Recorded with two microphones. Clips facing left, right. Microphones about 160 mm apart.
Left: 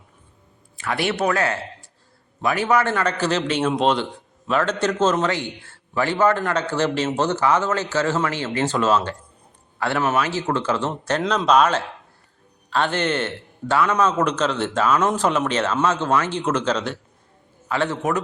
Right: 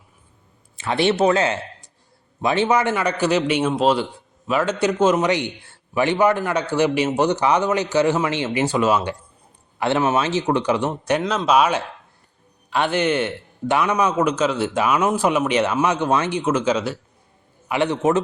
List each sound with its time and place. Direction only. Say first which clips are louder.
0.8 s a man's voice: right 5 dB; 25° right (ahead or behind)